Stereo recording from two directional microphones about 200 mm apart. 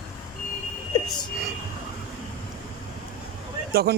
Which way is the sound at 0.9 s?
20° left (ahead or behind).